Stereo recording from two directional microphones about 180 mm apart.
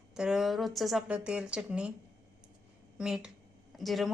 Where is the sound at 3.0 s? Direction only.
5° right (ahead or behind).